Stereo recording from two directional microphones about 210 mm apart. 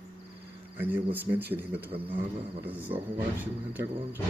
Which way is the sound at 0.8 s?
10° right (ahead or behind).